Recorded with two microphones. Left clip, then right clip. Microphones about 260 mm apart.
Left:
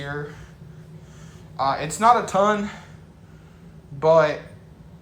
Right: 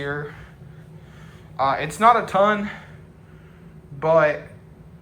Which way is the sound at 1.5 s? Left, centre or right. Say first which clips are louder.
Right 2 dB; centre.